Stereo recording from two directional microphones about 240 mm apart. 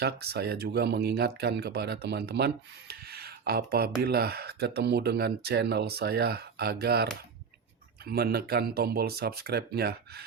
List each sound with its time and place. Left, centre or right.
0.0 s speech: right